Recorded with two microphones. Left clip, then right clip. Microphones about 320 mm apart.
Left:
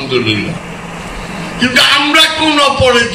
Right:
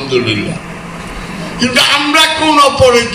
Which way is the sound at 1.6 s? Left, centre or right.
Centre.